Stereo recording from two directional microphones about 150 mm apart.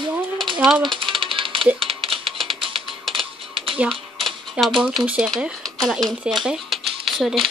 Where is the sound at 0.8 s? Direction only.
35° right (ahead or behind).